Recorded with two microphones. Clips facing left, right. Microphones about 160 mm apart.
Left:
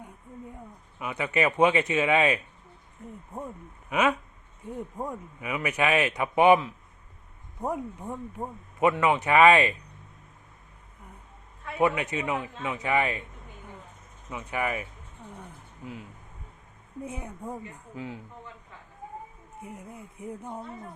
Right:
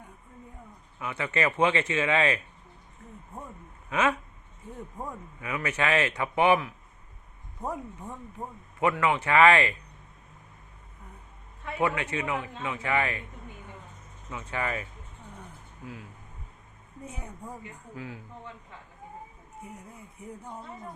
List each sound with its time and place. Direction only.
0.9 s speech: 15° left (ahead or behind)
3.8 s speech: 15° left (ahead or behind)
11.8 s a man's voice: 20° left (ahead or behind)
14.3 s a man's voice: 20° left (ahead or behind)
17.4 s a man's voice: 25° left (ahead or behind)